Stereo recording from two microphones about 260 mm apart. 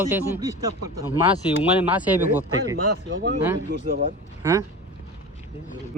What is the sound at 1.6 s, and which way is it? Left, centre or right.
Speech, centre.